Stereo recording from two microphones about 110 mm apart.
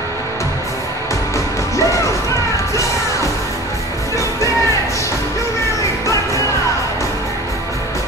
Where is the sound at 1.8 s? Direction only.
25° left (ahead or behind).